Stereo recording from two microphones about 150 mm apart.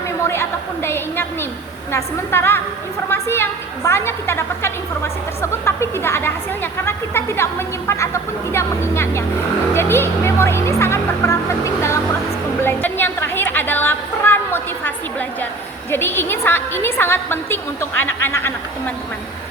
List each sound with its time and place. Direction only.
0.3 s a woman's voice: 15° left (ahead or behind)
12.6 s a sound: 15° left (ahead or behind)
15.9 s a woman's voice: 15° left (ahead or behind)